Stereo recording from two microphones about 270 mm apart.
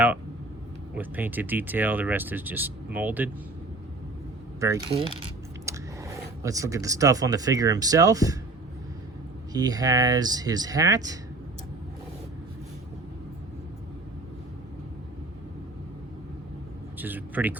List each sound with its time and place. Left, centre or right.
0.9 s speech: centre
4.6 s speech: centre
9.5 s speech: centre
17.0 s speech: centre